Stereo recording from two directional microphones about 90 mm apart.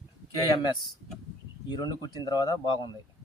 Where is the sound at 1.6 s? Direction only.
50° left (ahead or behind).